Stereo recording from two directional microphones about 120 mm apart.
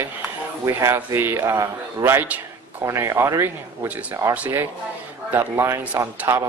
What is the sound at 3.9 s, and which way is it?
Speech, 10° right (ahead or behind).